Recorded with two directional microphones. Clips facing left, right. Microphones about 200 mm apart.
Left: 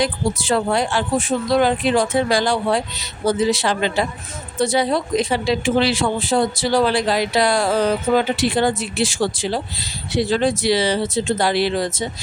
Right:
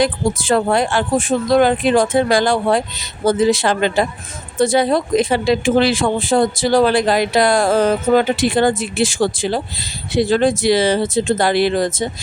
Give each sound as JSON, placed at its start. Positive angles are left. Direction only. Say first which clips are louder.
{"t": 0.0, "sound": "speech", "louder": "right 4 dB", "side_deg": -50}